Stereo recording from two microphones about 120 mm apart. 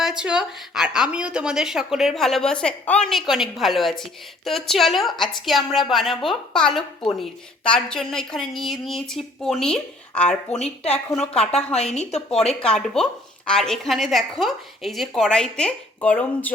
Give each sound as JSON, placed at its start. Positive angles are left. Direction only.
{"t": 0.0, "sound": "speech", "side_deg": -5}
{"t": 10.5, "sound": "speech", "side_deg": 70}
{"t": 11.2, "sound": "speech", "side_deg": 5}
{"t": 11.7, "sound": "a woman's voice", "side_deg": 65}
{"t": 12.6, "sound": "speech", "side_deg": 5}